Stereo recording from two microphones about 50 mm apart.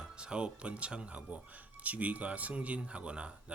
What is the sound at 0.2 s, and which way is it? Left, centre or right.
Speech, right.